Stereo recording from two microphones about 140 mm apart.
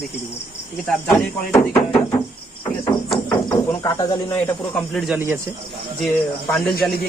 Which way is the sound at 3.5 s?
30° left (ahead or behind).